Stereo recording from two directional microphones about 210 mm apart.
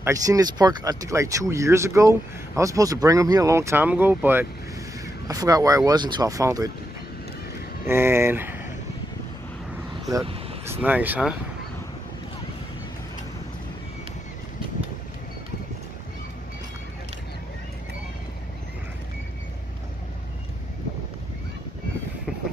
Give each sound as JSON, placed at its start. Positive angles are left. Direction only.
{"t": 0.0, "sound": "speech", "side_deg": -15}
{"t": 7.8, "sound": "speech", "side_deg": -10}
{"t": 10.6, "sound": "speech", "side_deg": -10}